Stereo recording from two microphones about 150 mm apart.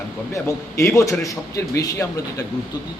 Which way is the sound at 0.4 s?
20° left (ahead or behind).